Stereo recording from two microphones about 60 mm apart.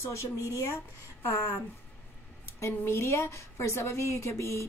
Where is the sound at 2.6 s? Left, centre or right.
Left.